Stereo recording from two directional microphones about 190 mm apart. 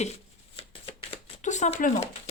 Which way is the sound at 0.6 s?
30° left (ahead or behind).